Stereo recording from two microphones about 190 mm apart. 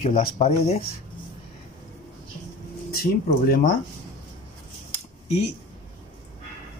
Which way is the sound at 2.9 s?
55° left (ahead or behind).